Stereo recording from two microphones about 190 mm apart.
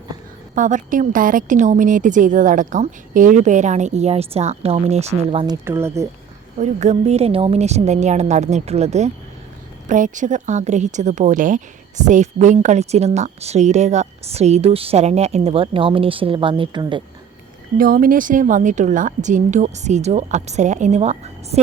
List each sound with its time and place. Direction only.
0.5 s a woman's voice: 45° right (ahead or behind)
5.6 s speech: 15° right (ahead or behind)
6.6 s a woman's voice: 35° right (ahead or behind)
17.7 s a woman's voice: 50° right (ahead or behind)